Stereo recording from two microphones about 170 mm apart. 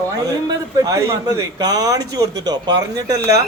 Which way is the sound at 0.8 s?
20° right (ahead or behind).